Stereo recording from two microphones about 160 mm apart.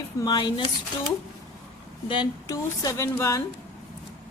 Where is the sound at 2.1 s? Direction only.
25° left (ahead or behind).